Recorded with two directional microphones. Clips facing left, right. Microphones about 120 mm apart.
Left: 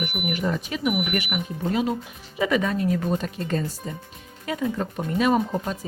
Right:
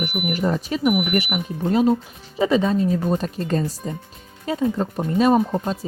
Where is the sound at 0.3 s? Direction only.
35° right (ahead or behind).